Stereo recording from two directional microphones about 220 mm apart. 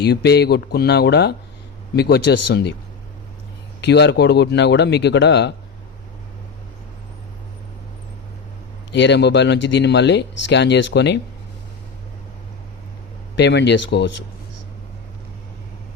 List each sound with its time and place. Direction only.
0.0 s speech: 50° left (ahead or behind)
3.8 s speech: 50° left (ahead or behind)
8.9 s speech: 50° left (ahead or behind)
13.3 s speech: 50° left (ahead or behind)